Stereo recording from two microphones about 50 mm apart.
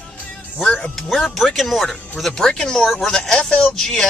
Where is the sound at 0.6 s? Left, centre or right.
Centre.